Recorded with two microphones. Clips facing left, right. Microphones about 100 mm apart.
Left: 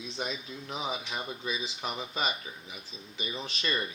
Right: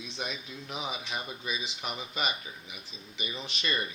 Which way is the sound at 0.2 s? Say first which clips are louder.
Left 2 dB; 30° left (ahead or behind).